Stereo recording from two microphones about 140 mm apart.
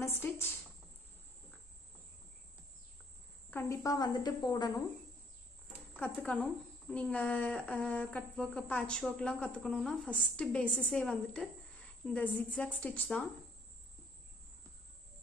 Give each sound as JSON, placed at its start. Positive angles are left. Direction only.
{"t": 0.0, "sound": "speech", "side_deg": 15}
{"t": 3.4, "sound": "speech", "side_deg": 15}
{"t": 5.9, "sound": "speech", "side_deg": 10}